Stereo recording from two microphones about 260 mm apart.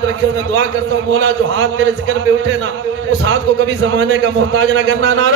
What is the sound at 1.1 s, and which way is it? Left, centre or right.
Speech, right.